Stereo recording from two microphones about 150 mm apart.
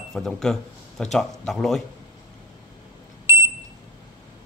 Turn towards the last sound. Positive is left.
turn(degrees=-20)  # may be behind; listen again after turning